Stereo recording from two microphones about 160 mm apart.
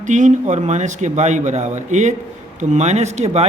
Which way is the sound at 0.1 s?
50° right (ahead or behind).